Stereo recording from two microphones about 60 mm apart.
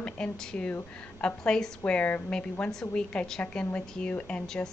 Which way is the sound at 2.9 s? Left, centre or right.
Centre.